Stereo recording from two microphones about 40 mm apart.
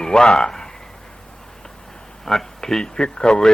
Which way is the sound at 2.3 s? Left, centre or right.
Centre.